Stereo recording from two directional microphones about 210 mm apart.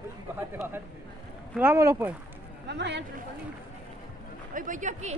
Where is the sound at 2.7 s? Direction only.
55° right (ahead or behind).